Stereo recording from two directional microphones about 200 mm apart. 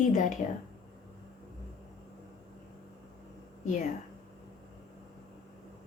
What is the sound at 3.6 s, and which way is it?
Speech, 40° left (ahead or behind).